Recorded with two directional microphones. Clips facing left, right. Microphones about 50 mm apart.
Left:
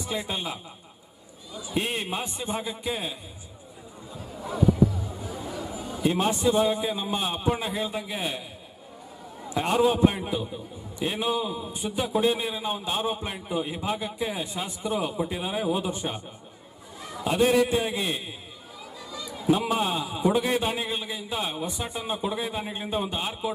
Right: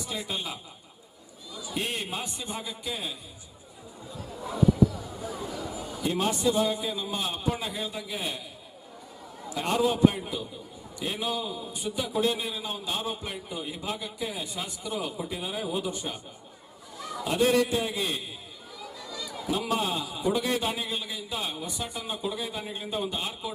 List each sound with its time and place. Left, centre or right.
0.1 s a man's voice: left
4.9 s music: centre
5.9 s a man's voice: left
9.5 s a man's voice: left
18.8 s chatter: centre
19.5 s a man's voice: left